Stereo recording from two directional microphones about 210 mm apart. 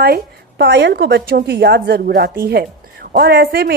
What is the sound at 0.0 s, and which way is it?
Speech, 50° right (ahead or behind).